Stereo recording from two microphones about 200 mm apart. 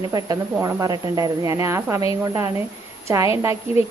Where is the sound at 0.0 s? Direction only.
20° right (ahead or behind).